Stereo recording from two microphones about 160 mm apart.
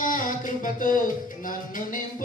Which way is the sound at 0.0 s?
55° left (ahead or behind).